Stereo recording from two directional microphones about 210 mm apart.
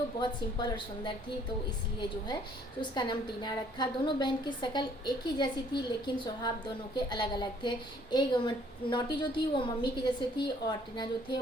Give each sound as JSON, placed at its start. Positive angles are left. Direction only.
{"t": 0.2, "sound": "a woman's voice", "side_deg": 20}